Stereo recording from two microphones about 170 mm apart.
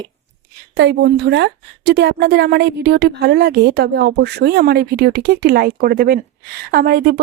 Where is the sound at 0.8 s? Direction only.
85° right.